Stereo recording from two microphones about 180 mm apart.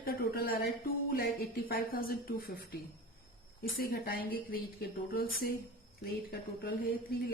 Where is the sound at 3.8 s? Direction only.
55° left (ahead or behind).